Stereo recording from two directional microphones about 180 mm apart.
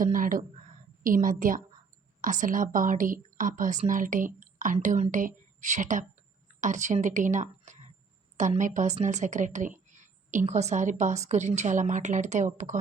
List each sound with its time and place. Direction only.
0.0 s a woman's voice: 50° right (ahead or behind)